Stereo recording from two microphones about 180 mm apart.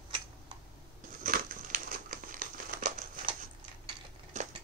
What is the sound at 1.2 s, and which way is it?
Crumpling, 50° right (ahead or behind).